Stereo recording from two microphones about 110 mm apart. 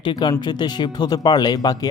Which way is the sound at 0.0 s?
45° left (ahead or behind).